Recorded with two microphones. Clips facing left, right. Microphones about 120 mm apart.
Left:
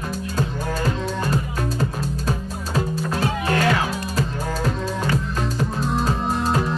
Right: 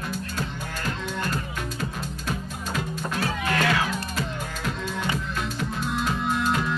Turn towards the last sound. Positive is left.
turn(degrees=35)  # may be behind; listen again after turning